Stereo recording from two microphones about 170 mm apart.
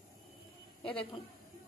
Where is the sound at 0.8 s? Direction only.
30° left (ahead or behind).